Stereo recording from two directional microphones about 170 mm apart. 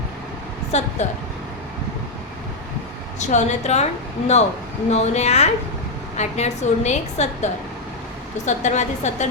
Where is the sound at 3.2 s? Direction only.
45° left (ahead or behind).